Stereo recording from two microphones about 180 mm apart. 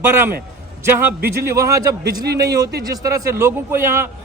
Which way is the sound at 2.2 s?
65° right (ahead or behind).